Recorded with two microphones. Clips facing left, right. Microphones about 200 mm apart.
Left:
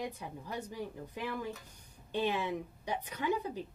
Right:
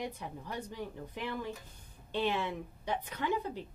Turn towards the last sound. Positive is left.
turn(degrees=10)  # may be behind; listen again after turning